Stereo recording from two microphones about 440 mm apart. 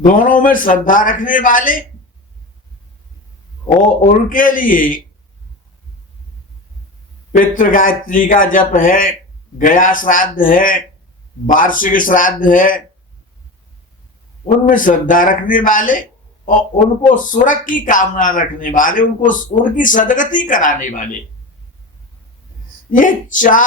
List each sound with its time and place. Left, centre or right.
0.0 s speech: centre
4.0 s speech: centre
7.3 s a man's voice: centre
14.4 s speech: centre
17.1 s speech: centre
22.9 s speech: centre